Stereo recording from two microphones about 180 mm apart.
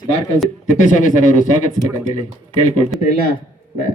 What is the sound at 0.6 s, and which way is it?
Speech, 45° left (ahead or behind).